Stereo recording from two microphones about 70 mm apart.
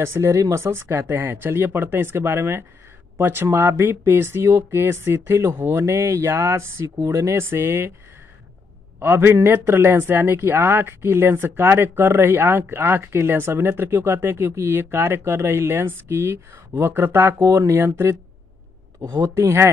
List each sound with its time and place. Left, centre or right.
0.0 s speech: right
9.0 s speech: right